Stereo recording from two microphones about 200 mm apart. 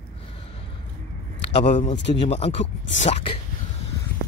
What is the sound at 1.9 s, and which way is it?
Speech, 60° left (ahead or behind).